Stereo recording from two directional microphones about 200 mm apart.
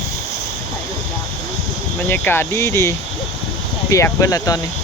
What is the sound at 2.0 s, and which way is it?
Speech, 10° left (ahead or behind).